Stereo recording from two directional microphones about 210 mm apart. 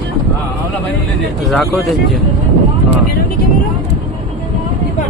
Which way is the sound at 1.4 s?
Centre (ahead or behind).